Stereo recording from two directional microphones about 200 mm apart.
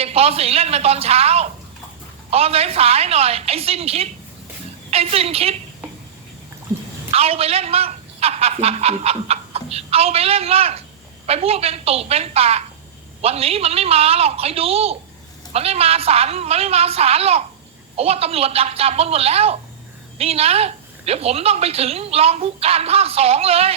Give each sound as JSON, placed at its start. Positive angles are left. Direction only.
{"t": 0.0, "sound": "a woman's voice", "side_deg": -30}
{"t": 7.1, "sound": "a man's voice", "side_deg": -30}